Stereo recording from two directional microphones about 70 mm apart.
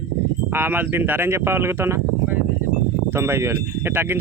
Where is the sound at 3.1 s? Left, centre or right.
Right.